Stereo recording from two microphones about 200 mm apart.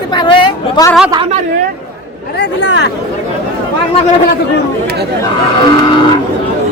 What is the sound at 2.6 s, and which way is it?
Speech, 60° left (ahead or behind).